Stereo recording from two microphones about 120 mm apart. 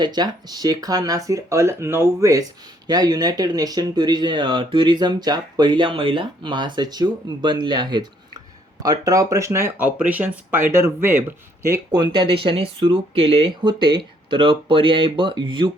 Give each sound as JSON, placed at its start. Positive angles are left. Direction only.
{"t": 0.0, "sound": "speech", "side_deg": -35}
{"t": 2.8, "sound": "speech", "side_deg": -35}
{"t": 11.9, "sound": "speech", "side_deg": -40}